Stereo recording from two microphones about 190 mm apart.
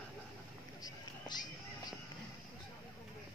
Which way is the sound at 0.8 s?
20° left (ahead or behind).